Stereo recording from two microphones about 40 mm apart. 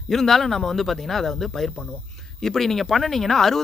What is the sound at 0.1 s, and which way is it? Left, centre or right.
Speech, centre.